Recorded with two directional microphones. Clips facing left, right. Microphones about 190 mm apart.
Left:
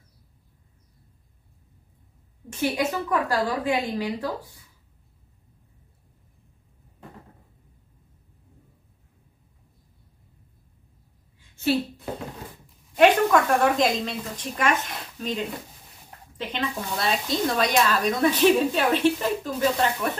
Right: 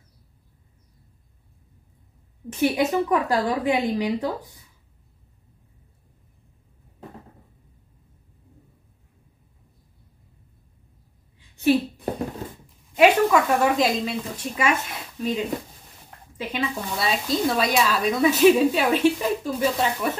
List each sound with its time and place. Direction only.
2.6 s a woman's voice: 20° right (ahead or behind)
11.3 s a sound: 15° right (ahead or behind)
12.9 s speech: 5° right (ahead or behind)